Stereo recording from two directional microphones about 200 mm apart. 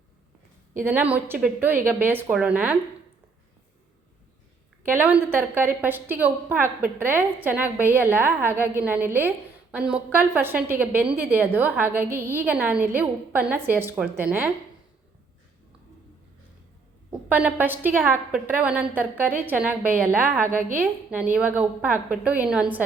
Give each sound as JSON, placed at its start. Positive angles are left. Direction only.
{"t": 0.8, "sound": "a woman's voice", "side_deg": -10}
{"t": 4.9, "sound": "a woman's voice", "side_deg": -10}
{"t": 17.1, "sound": "a woman's voice", "side_deg": -5}
{"t": 20.5, "sound": "a woman's voice", "side_deg": -40}
{"t": 20.7, "sound": "a woman's voice", "side_deg": -10}